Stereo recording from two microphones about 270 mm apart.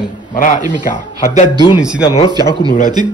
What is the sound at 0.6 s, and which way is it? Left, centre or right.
Speech, centre.